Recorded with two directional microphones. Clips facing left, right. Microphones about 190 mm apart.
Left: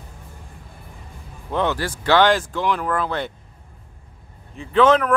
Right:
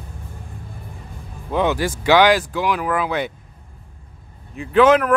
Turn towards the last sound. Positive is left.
turn(degrees=-5)  # may be behind; listen again after turning